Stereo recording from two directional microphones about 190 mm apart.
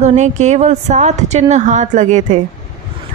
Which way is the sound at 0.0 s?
35° right (ahead or behind).